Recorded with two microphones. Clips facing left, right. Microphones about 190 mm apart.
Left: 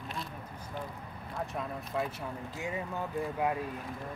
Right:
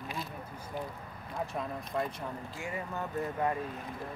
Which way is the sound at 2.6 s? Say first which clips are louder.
Left 2 dB; 20° left (ahead or behind).